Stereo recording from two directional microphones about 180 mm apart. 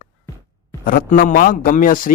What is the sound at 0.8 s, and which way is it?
Speech, 50° left (ahead or behind).